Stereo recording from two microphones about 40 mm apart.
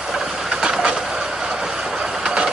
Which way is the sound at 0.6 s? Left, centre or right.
Centre.